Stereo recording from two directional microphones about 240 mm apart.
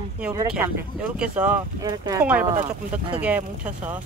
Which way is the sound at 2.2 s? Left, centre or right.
Centre.